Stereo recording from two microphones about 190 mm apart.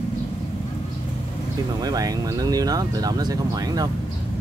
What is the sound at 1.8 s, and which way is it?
Speech, 20° right (ahead or behind).